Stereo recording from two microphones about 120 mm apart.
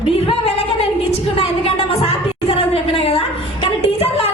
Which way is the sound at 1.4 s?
50° left (ahead or behind).